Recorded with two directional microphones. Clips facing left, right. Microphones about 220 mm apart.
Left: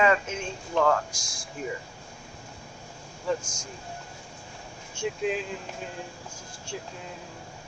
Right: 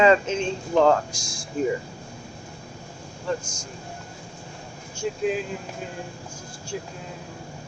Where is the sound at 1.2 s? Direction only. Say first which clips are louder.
Right 6 dB; 10° right (ahead or behind).